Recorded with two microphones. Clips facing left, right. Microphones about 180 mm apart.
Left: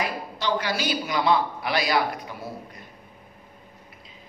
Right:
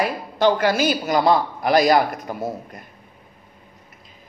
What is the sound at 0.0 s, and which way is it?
A man's voice, 50° right (ahead or behind).